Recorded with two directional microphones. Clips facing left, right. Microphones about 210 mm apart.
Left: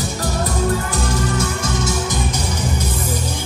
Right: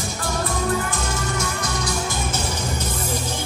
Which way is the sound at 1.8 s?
15° left (ahead or behind).